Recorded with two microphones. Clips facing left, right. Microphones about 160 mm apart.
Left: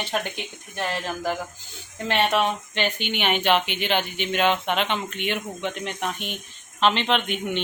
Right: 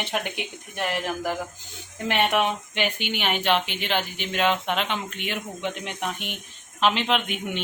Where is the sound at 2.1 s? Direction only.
15° right (ahead or behind).